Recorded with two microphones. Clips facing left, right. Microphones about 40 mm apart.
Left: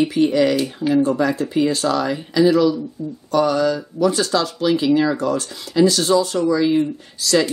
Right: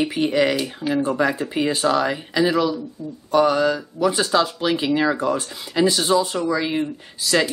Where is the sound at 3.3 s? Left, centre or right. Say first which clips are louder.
Even; right.